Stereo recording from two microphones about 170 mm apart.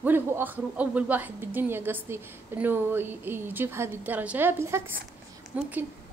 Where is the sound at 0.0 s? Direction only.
10° right (ahead or behind).